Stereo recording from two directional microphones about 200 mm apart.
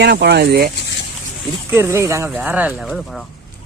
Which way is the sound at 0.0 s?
55° right (ahead or behind).